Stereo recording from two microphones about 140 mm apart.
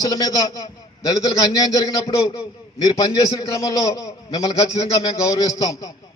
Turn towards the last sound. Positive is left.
turn(degrees=25)  # may be behind; listen again after turning